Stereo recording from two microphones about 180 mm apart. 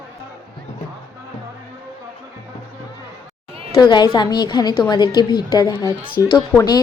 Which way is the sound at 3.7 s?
25° left (ahead or behind).